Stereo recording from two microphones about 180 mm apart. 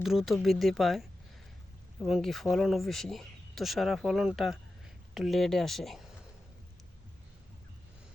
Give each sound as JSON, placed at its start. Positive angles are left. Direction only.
{"t": 0.0, "sound": "speech", "side_deg": 0}